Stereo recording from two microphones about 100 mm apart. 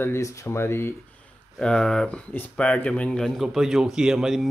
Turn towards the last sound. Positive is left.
turn(degrees=-5)  # may be behind; listen again after turning